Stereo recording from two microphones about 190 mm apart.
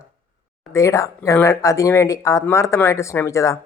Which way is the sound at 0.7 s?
15° left (ahead or behind).